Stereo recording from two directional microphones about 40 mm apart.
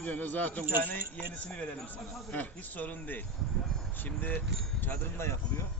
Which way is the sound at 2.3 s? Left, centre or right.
Left.